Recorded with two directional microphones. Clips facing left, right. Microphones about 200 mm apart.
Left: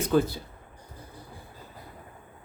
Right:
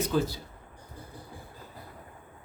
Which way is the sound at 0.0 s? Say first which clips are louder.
Left 4 dB; 55° left (ahead or behind).